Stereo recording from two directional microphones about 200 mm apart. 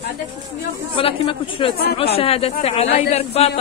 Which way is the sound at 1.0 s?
25° left (ahead or behind).